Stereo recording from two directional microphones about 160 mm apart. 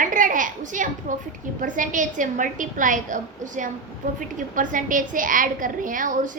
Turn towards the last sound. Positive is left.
turn(degrees=-55)  # may be behind; listen again after turning